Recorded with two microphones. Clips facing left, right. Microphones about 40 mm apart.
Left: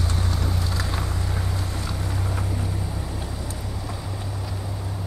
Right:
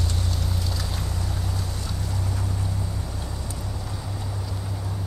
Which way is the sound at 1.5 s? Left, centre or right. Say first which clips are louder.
Left 2 dB; left.